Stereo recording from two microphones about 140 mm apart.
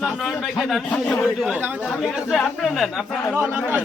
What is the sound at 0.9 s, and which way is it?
Speech, 10° left (ahead or behind).